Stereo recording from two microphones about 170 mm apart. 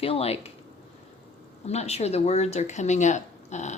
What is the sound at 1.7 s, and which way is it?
Speech, 40° left (ahead or behind).